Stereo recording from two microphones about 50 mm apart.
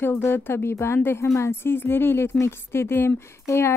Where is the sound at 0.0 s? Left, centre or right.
Left.